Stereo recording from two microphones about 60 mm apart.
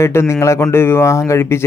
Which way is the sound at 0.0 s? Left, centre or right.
Left.